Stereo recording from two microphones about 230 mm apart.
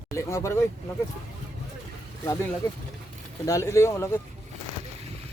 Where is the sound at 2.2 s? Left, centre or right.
Centre.